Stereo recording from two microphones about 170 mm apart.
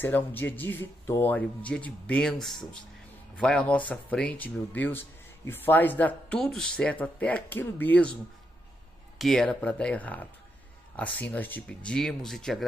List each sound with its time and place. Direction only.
0.0 s speech: 10° left (ahead or behind)
9.2 s speech: 5° left (ahead or behind)